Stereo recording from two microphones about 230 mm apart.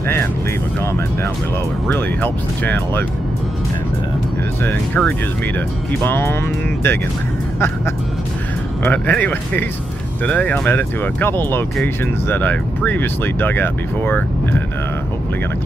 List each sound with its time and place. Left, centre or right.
1.9 s speech: centre
4.6 s speech: centre
8.8 s speech: centre